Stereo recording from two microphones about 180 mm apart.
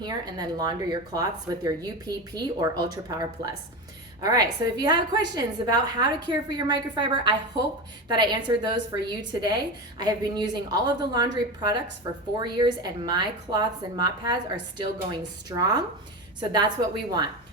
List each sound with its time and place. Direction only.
0.0 s speech: 20° right (ahead or behind)
10.0 s speech: 25° right (ahead or behind)